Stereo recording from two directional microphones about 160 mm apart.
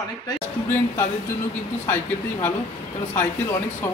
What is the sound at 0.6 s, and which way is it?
Speech, 15° left (ahead or behind).